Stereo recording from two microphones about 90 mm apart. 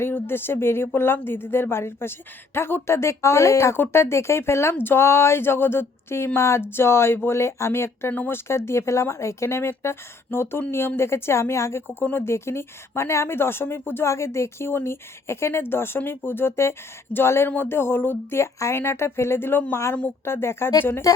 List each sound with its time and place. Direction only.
0.0 s a woman's voice: 25° left (ahead or behind)